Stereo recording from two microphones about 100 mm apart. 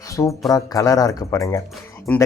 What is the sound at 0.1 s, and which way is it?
Music, 30° left (ahead or behind).